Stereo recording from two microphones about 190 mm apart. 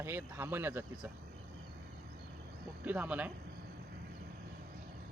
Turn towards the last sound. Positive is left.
turn(degrees=-10)  # may be behind; listen again after turning